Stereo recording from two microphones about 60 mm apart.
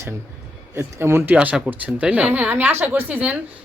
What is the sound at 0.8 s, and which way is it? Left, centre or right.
Speech, right.